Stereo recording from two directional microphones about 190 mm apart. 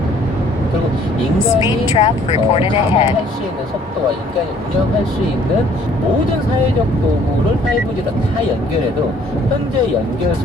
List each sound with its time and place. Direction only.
2.0 s speech: 35° left (ahead or behind)